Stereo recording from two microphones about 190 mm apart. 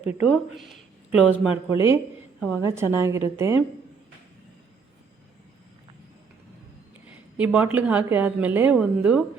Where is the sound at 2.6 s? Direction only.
15° right (ahead or behind).